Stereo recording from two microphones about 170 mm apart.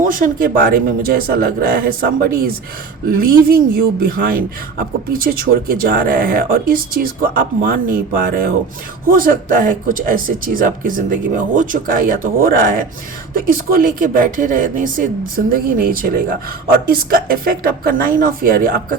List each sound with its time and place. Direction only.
0.0 s speech: 55° right (ahead or behind)